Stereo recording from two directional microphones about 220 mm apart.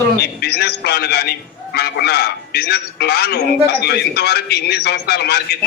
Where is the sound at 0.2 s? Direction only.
45° left (ahead or behind).